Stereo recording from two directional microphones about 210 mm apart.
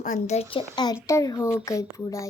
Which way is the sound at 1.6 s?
15° left (ahead or behind).